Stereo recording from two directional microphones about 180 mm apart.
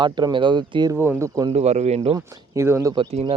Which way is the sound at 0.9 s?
15° right (ahead or behind).